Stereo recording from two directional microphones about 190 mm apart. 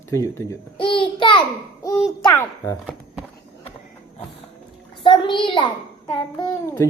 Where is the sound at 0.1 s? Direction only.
15° left (ahead or behind).